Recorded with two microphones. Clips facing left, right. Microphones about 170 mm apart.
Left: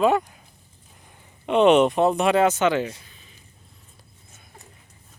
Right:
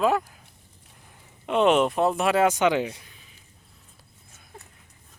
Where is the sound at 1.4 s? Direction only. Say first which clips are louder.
Left 4 dB; centre (ahead or behind).